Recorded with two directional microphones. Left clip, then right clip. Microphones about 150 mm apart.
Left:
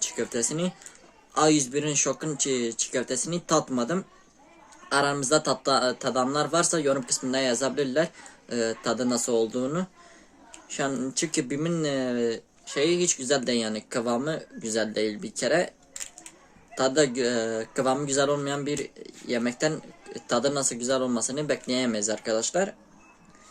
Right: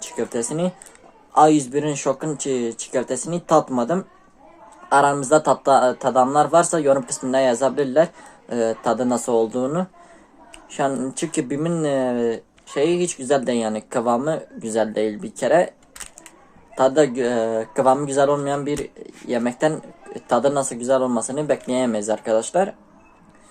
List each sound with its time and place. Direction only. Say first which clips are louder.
0.3 s speech: right 6 dB; 30° left (ahead or behind)
2.0 s speech: right 4 dB; 30° left (ahead or behind)
16.7 s speech: right 7 dB; 25° left (ahead or behind)